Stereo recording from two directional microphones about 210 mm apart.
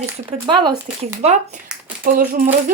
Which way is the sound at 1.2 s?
35° right (ahead or behind).